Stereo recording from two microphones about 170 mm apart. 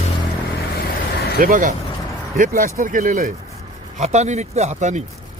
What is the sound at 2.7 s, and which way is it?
Speech, 50° right (ahead or behind).